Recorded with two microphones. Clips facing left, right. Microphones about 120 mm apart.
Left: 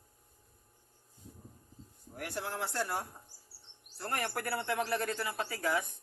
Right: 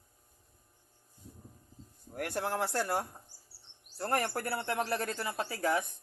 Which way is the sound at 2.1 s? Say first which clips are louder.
Right 5 dB; 55° right (ahead or behind).